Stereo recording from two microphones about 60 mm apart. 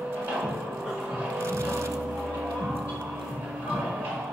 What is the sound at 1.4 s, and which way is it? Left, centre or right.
Vehicle, right.